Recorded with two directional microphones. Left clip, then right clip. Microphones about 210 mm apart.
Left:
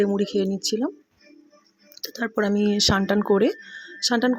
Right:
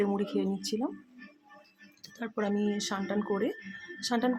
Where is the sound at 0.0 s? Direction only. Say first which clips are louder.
Left 8 dB; 20° left (ahead or behind).